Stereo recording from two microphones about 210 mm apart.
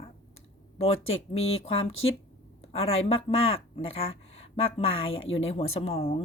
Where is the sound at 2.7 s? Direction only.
30° left (ahead or behind).